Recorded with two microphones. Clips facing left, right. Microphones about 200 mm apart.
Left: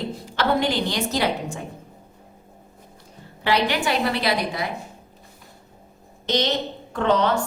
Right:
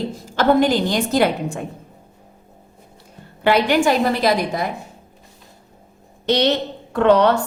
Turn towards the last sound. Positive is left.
turn(degrees=-65)  # may be behind; listen again after turning